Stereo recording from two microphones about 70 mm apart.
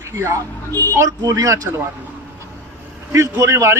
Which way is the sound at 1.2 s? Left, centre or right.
Right.